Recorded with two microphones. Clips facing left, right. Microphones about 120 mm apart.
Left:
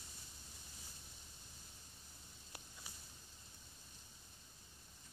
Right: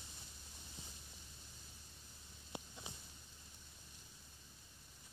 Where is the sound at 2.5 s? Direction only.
20° right (ahead or behind).